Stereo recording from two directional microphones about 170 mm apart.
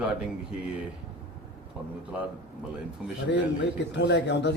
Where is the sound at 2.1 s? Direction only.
10° right (ahead or behind).